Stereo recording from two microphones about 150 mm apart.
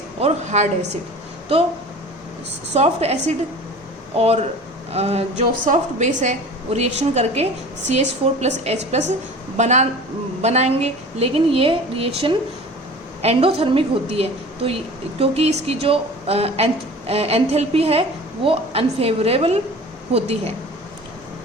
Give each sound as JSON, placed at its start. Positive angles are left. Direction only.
{"t": 0.2, "sound": "a woman's voice", "side_deg": -50}
{"t": 2.7, "sound": "a woman's voice", "side_deg": -45}